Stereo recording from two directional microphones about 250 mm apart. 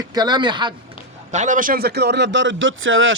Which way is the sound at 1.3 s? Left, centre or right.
Right.